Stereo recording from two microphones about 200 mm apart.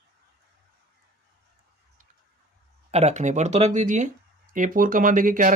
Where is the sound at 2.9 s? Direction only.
35° right (ahead or behind).